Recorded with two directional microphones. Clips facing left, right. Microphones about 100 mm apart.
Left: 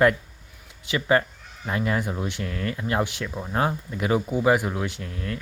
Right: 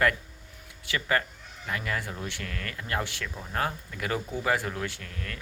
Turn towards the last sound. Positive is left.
turn(degrees=25)  # may be behind; listen again after turning